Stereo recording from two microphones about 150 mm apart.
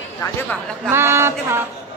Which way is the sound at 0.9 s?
15° right (ahead or behind).